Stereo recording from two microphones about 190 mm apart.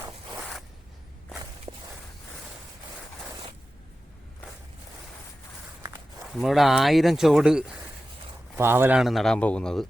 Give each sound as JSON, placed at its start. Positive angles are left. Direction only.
{"t": 1.7, "sound": "walk", "side_deg": -25}
{"t": 6.3, "sound": "speech", "side_deg": 0}